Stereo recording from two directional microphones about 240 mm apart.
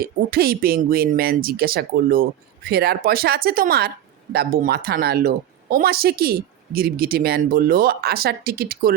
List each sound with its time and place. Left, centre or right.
0.0 s speech: right